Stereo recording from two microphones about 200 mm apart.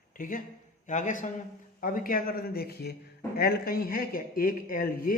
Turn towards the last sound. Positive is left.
turn(degrees=45)  # may be behind; listen again after turning